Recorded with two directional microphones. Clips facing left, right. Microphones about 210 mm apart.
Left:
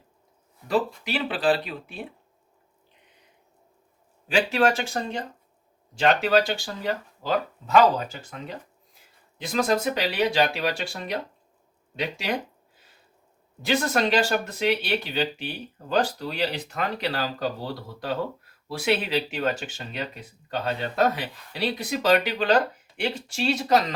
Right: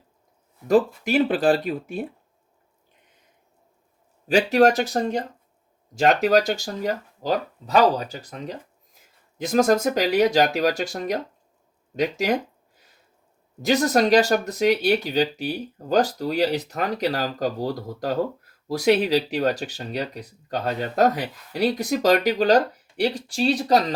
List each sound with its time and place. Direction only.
0.7 s speech: 45° right (ahead or behind)
4.3 s speech: 40° right (ahead or behind)
13.6 s speech: 40° right (ahead or behind)